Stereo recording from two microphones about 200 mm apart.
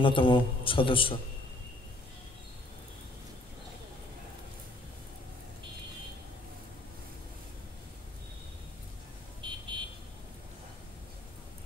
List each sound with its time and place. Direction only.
0.0 s a man's voice: 25° left (ahead or behind)
9.4 s vehicle: 25° right (ahead or behind)